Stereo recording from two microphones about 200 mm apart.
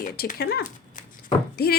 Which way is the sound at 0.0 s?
45° left (ahead or behind).